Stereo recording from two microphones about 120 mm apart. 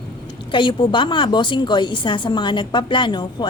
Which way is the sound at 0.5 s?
40° left (ahead or behind).